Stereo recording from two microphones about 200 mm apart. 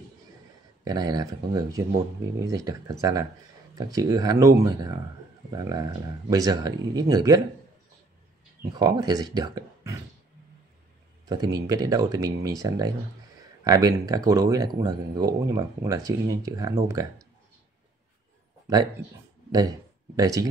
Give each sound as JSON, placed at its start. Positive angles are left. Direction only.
{"t": 0.8, "sound": "speech", "side_deg": -20}
{"t": 8.7, "sound": "speech", "side_deg": -20}
{"t": 11.5, "sound": "speech", "side_deg": -15}
{"t": 20.2, "sound": "speech", "side_deg": -15}